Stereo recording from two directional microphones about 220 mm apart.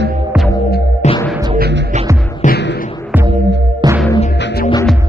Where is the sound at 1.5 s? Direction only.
50° right (ahead or behind).